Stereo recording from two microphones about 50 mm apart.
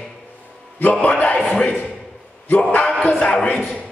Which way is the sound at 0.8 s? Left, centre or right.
Left.